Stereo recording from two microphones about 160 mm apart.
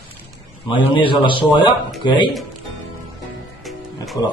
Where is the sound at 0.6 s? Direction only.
30° left (ahead or behind).